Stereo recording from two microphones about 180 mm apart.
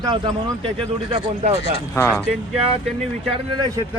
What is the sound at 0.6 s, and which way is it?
Speech, 30° right (ahead or behind).